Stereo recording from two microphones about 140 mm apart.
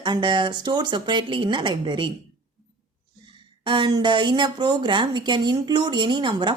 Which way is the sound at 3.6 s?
35° right (ahead or behind).